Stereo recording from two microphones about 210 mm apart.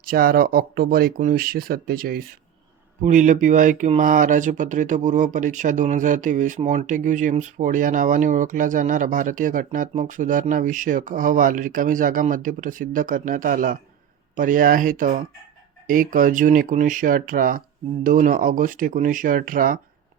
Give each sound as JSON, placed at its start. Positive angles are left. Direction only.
{"t": 0.0, "sound": "speech", "side_deg": -45}